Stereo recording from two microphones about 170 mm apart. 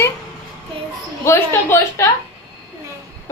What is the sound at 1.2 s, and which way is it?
Speech, 15° left (ahead or behind).